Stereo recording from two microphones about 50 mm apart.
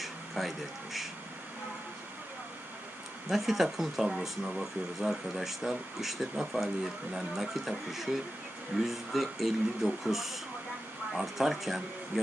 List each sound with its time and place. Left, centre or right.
0.0 s music: centre
3.2 s speech: centre